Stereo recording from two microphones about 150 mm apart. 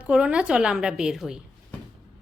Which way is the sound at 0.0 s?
5° right (ahead or behind).